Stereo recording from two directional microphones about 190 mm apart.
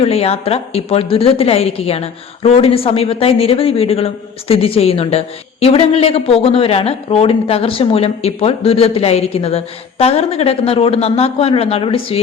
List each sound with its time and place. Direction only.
0.0 s a woman's voice: 30° left (ahead or behind)